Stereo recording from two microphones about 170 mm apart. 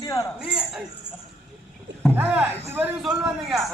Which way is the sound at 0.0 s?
20° left (ahead or behind).